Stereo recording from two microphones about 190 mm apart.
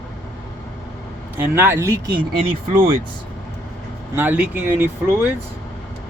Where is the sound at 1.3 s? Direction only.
10° right (ahead or behind).